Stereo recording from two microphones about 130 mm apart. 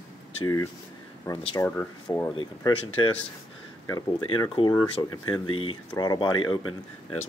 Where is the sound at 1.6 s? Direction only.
25° left (ahead or behind).